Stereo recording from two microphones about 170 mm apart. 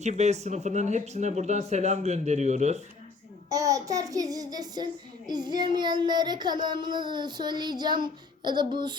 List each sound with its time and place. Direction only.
0.0 s speech: 40° right (ahead or behind)
3.5 s child singing: 20° right (ahead or behind)